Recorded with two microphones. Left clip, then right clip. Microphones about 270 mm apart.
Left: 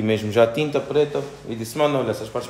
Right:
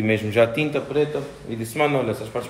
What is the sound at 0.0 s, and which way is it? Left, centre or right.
Speech, centre.